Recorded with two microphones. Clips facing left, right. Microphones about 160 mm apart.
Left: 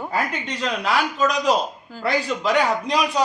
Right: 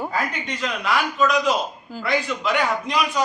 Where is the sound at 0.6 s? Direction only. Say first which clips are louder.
Left 1 dB; 35° left (ahead or behind).